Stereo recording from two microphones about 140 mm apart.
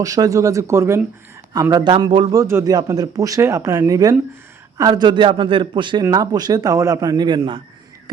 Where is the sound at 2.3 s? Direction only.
20° right (ahead or behind).